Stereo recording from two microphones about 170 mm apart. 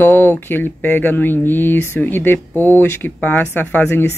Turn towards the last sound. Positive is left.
turn(degrees=10)  # may be behind; listen again after turning